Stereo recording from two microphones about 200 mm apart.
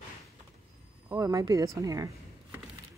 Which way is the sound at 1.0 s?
15° right (ahead or behind).